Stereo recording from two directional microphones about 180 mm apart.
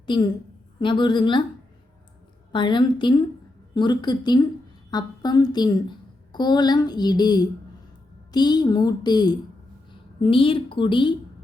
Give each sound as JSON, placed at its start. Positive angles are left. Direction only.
{"t": 0.0, "sound": "a woman's voice", "side_deg": 25}
{"t": 2.5, "sound": "a woman's voice", "side_deg": 25}